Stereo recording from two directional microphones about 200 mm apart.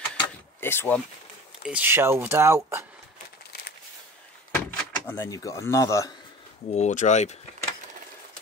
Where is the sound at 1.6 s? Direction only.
5° right (ahead or behind).